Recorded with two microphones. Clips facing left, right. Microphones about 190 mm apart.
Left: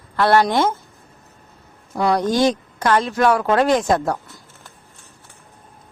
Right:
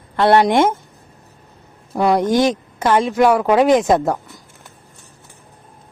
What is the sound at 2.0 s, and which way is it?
Speech, 20° right (ahead or behind).